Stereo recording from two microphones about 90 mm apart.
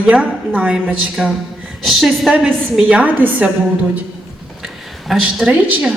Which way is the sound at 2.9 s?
20° right (ahead or behind).